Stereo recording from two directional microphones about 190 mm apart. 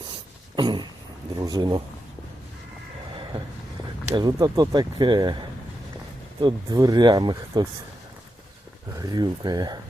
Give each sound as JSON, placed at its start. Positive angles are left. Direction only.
{"t": 0.5, "sound": "a sound", "side_deg": -25}
{"t": 1.4, "sound": "speech", "side_deg": -20}
{"t": 4.1, "sound": "speech", "side_deg": -20}
{"t": 8.9, "sound": "speech", "side_deg": -20}